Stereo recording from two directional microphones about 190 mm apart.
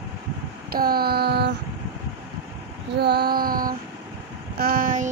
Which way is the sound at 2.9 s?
60° right (ahead or behind).